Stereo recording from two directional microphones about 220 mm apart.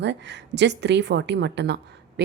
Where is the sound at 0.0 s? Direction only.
50° right (ahead or behind).